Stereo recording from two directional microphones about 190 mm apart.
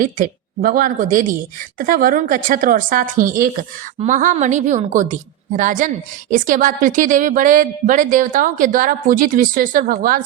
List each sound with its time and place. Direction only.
0.0 s a woman's voice: 45° right (ahead or behind)